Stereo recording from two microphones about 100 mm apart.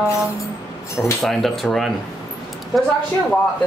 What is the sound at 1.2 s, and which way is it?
Speech, 5° left (ahead or behind).